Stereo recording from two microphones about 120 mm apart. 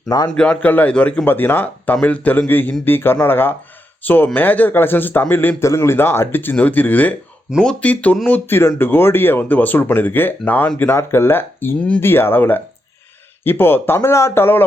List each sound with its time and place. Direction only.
0.3 s speech: 10° left (ahead or behind)